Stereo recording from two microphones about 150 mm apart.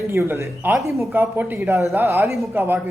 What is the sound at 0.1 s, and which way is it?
A man's voice, 15° right (ahead or behind).